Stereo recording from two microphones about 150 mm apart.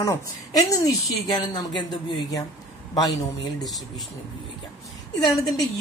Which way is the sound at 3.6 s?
Centre (ahead or behind).